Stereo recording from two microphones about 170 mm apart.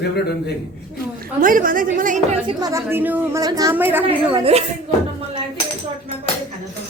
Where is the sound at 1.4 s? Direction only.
55° right (ahead or behind).